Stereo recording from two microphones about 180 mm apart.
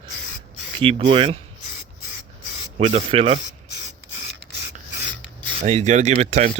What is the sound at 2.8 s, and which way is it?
Speech, 35° right (ahead or behind).